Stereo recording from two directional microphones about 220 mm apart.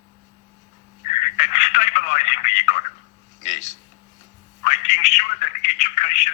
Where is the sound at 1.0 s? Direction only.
30° left (ahead or behind).